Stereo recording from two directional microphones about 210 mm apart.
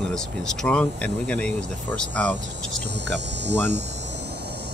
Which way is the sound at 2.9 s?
55° right (ahead or behind).